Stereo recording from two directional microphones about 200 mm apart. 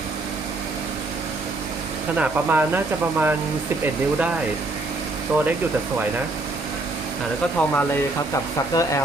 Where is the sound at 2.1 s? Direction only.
10° right (ahead or behind).